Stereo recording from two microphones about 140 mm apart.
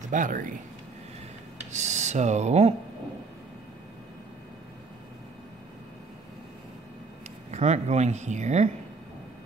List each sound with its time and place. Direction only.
0.1 s speech: 70° right (ahead or behind)
1.7 s speech: 55° right (ahead or behind)
7.5 s speech: 50° right (ahead or behind)